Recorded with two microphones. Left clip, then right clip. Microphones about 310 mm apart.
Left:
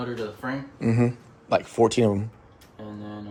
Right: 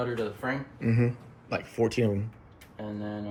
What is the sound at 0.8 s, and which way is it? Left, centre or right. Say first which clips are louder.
Speech: left 7 dB; centre.